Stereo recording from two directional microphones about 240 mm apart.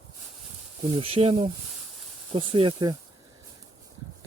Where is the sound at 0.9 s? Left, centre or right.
Right.